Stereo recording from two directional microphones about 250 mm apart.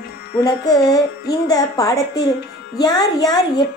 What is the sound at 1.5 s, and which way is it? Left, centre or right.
A woman's voice, centre.